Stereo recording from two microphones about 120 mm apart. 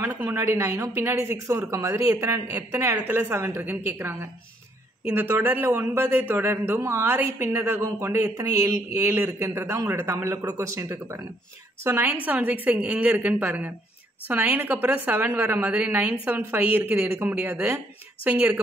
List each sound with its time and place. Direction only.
0.0 s a man's voice: 20° right (ahead or behind)